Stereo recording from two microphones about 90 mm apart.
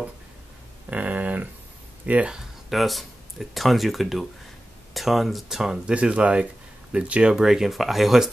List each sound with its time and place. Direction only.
0.8 s a sound: 20° right (ahead or behind)
2.0 s speech: 15° right (ahead or behind)
2.3 s speech: centre (ahead or behind)